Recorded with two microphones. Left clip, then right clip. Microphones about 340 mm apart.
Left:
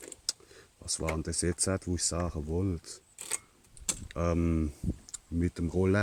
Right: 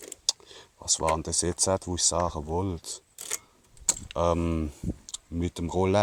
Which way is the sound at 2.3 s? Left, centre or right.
Right.